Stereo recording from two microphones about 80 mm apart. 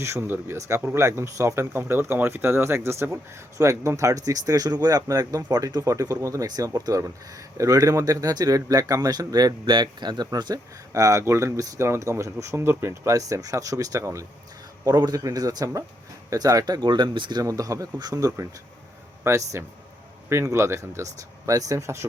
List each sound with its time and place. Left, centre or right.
0.0 s speech: right
11.2 s speech: right
14.8 s speech: right
17.4 s speech: right